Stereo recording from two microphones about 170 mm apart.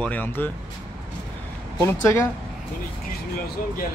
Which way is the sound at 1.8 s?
15° left (ahead or behind).